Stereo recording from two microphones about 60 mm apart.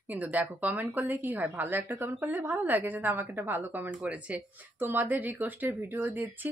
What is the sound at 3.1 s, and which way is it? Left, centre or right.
A woman's voice, right.